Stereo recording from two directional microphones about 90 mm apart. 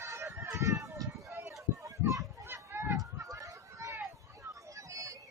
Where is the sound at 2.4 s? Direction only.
25° right (ahead or behind).